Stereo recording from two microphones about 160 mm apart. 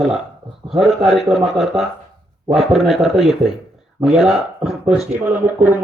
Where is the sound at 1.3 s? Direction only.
Centre (ahead or behind).